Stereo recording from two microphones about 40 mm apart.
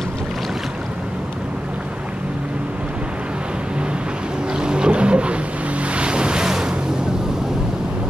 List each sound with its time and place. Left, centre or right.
4.6 s ocean: right